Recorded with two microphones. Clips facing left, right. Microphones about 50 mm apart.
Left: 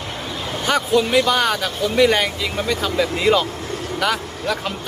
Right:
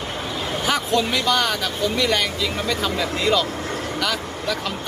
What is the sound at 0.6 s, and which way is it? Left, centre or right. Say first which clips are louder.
Speech: left 4 dB; centre.